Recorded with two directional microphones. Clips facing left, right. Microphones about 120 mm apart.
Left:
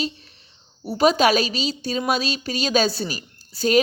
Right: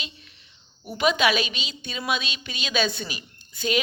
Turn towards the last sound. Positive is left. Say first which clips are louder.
# left 6 dB
turn(degrees=40)  # may be behind; listen again after turning